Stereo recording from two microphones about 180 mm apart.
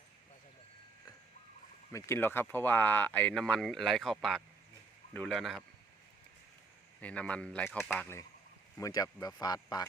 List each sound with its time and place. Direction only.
1.9 s speech: 15° left (ahead or behind)
7.0 s speech: 5° left (ahead or behind)